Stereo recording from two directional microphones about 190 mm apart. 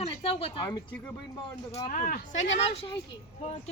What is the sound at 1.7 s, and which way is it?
Speech, 45° left (ahead or behind).